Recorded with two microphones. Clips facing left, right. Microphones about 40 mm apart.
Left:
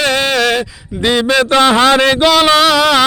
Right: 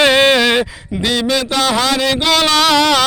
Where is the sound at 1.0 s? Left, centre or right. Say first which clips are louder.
Left 4 dB; centre.